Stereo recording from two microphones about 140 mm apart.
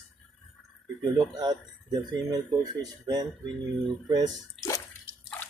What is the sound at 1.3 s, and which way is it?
Speech, 30° right (ahead or behind).